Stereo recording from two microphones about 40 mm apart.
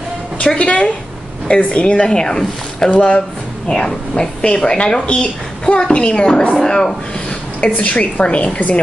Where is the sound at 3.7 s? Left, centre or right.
Centre.